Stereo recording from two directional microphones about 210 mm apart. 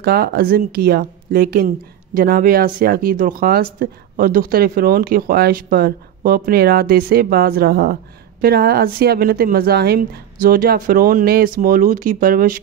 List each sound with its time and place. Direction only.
0.0 s speech: 50° right (ahead or behind)